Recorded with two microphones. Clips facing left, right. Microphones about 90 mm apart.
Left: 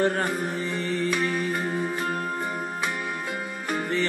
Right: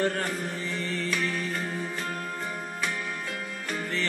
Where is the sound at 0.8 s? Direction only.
20° left (ahead or behind).